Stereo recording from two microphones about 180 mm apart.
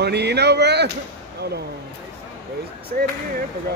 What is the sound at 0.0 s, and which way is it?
Speech, 65° right (ahead or behind).